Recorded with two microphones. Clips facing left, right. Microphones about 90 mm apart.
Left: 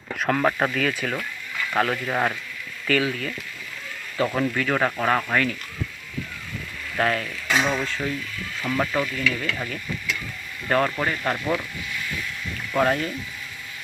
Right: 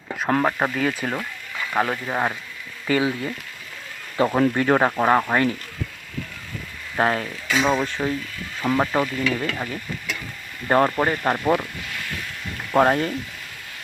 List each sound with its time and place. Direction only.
0.2 s speech: 25° right (ahead or behind)
1.8 s speech: 15° right (ahead or behind)
4.2 s stir: 30° right (ahead or behind)
4.9 s speech: 20° right (ahead or behind)
6.9 s stir: 30° right (ahead or behind)
7.7 s speech: 30° right (ahead or behind)
8.6 s stir: 30° right (ahead or behind)
10.7 s stir: 30° right (ahead or behind)
12.7 s stir: 40° right (ahead or behind)